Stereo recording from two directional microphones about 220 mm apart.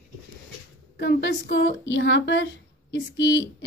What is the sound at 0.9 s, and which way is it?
A woman's voice, 50° left (ahead or behind).